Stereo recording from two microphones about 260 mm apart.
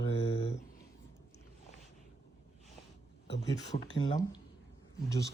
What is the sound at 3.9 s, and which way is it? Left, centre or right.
Speech, centre.